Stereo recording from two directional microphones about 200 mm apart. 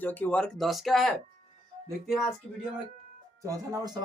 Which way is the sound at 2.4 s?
Centre (ahead or behind).